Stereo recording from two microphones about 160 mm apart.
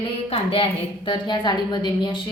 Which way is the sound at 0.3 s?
35° left (ahead or behind).